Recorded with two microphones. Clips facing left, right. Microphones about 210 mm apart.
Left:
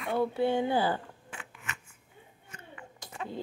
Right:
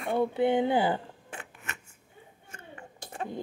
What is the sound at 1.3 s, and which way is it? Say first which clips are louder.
Scissors: right 2 dB; 40° right (ahead or behind).